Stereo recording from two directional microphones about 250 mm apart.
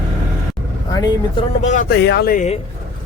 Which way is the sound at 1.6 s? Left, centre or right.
Left.